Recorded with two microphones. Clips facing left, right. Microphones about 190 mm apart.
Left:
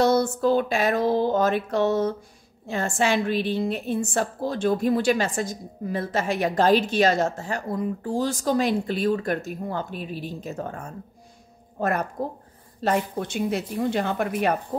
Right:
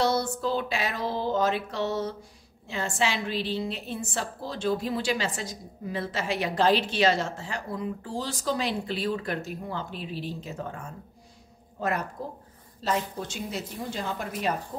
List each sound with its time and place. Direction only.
0.0 s a woman's voice: 50° left (ahead or behind)